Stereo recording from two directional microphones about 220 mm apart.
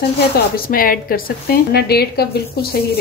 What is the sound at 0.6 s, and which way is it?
A woman's voice, 40° left (ahead or behind).